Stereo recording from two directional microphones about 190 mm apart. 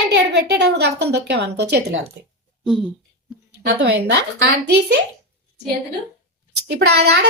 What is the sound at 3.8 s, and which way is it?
Speech, 65° right (ahead or behind).